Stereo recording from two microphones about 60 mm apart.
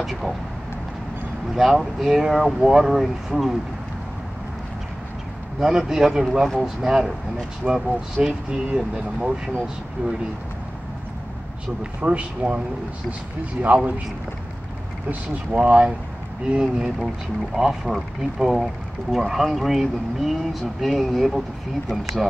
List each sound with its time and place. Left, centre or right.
0.0 s speech: centre
1.5 s speech: centre
5.6 s speech: centre
11.6 s speech: right
15.0 s speech: right; by 22.4 s centre